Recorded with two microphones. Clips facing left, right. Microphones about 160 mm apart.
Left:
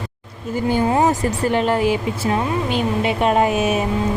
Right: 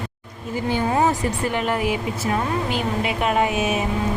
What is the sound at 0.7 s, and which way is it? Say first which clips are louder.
Speech: left 3 dB; 45° left (ahead or behind).